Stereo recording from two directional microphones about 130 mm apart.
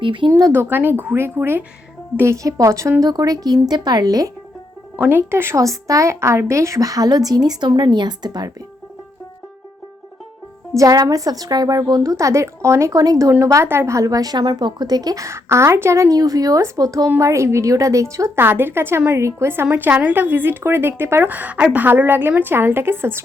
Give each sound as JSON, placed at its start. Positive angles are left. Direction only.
{"t": 0.0, "sound": "speech", "side_deg": -40}
{"t": 0.5, "sound": "a woman's voice", "side_deg": -15}
{"t": 4.9, "sound": "a woman's voice", "side_deg": -15}
{"t": 10.8, "sound": "a woman's voice", "side_deg": -30}